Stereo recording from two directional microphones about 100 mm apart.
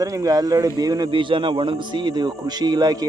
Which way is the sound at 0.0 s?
35° right (ahead or behind).